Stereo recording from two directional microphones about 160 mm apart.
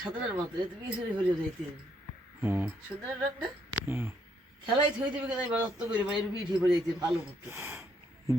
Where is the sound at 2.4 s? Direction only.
10° right (ahead or behind).